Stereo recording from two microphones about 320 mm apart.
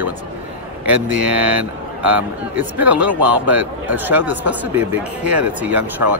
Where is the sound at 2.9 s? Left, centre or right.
Right.